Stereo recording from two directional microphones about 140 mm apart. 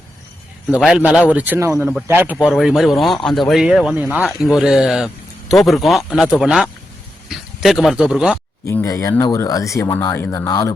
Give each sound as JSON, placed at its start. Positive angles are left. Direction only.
{"t": 0.7, "sound": "a man's voice", "side_deg": -5}
{"t": 8.6, "sound": "speech", "side_deg": 20}